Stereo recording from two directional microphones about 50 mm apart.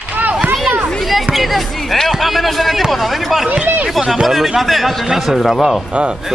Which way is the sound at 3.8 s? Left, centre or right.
Centre.